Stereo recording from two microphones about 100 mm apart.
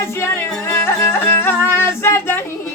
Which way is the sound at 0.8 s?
25° left (ahead or behind).